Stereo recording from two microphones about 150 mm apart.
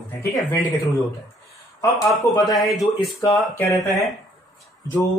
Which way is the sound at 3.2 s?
15° left (ahead or behind).